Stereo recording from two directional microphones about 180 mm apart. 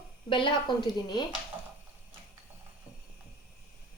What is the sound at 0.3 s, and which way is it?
Speech, 25° left (ahead or behind).